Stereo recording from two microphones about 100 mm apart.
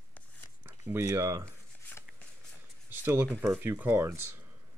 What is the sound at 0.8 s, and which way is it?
Speech, 30° right (ahead or behind).